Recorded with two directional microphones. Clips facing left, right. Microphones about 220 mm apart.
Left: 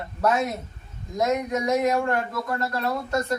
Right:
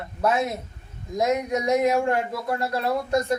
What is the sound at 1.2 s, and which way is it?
A woman's voice, 15° right (ahead or behind).